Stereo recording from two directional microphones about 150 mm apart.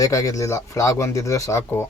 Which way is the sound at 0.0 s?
20° left (ahead or behind).